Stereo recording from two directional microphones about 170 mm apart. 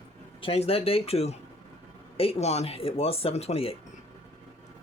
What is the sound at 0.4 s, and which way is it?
Speech, 35° left (ahead or behind).